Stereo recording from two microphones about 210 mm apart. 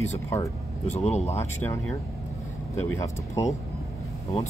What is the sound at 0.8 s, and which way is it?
Speech, 30° left (ahead or behind).